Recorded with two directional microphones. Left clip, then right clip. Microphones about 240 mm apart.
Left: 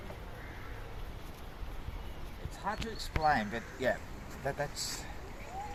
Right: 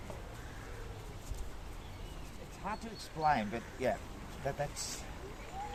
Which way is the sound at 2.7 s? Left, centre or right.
Centre.